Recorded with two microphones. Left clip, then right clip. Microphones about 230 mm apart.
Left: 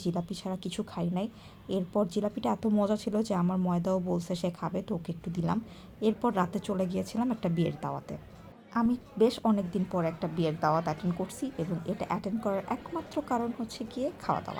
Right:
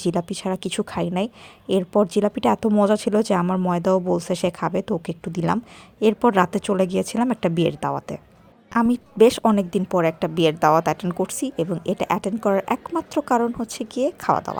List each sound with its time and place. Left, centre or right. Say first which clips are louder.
0.0 s a woman's voice: right 11 dB; right